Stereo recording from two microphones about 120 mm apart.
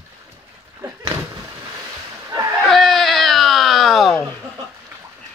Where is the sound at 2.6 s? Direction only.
Centre (ahead or behind).